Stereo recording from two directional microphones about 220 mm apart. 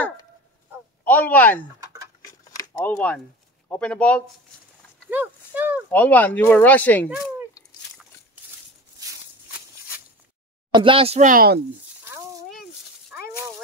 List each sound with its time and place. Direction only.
1.0 s speech: 10° left (ahead or behind)
1.8 s bird: 15° right (ahead or behind)
2.2 s a sound: 15° left (ahead or behind)
3.6 s speech: 5° left (ahead or behind)
5.1 s speech: 5° right (ahead or behind)
5.9 s speech: 10° left (ahead or behind)
10.7 s speech: 25° right (ahead or behind); by 11.6 s 40° right (ahead or behind)